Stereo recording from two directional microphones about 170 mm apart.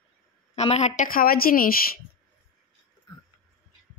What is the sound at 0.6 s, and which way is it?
A woman's voice, 40° left (ahead or behind).